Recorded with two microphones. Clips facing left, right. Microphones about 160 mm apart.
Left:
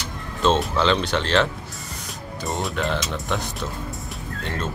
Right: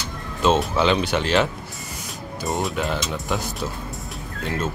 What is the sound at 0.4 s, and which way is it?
Speech, 5° right (ahead or behind).